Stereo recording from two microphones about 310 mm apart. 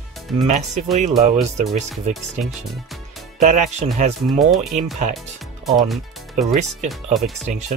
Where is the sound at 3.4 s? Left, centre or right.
Right.